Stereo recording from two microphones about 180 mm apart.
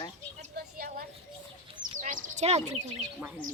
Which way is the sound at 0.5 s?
55° right (ahead or behind).